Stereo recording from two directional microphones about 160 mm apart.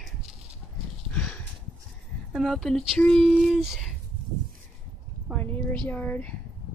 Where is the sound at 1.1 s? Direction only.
5° left (ahead or behind).